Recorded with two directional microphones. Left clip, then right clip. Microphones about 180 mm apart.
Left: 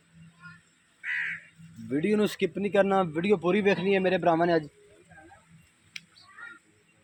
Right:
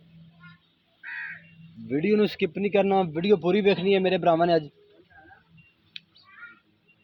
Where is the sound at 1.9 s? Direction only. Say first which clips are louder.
Right 3 dB; 45° right (ahead or behind); by 4.7 s 30° right (ahead or behind).